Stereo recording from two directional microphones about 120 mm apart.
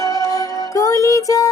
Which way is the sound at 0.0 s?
25° left (ahead or behind).